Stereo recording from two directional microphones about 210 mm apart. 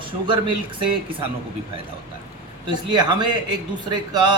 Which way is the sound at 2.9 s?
20° right (ahead or behind).